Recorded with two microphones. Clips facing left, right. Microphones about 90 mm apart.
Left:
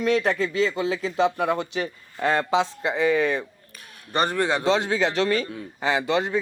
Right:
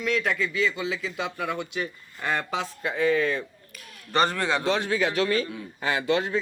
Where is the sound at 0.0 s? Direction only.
35° left (ahead or behind).